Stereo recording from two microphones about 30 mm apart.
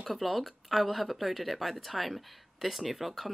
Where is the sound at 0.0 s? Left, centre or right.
Centre.